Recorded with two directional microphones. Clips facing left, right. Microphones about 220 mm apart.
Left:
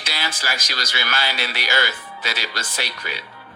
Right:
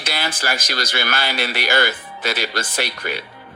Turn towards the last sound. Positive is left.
turn(degrees=-55)  # may be behind; listen again after turning